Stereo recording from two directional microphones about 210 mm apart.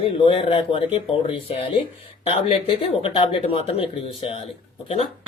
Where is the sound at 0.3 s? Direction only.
25° left (ahead or behind).